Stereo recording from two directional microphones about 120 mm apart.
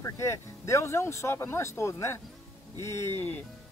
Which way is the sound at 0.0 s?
25° left (ahead or behind).